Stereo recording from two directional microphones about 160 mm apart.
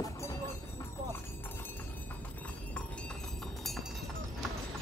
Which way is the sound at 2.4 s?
5° left (ahead or behind).